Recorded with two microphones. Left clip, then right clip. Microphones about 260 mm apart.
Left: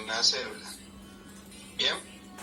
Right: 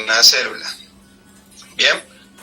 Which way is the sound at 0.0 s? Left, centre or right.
Right.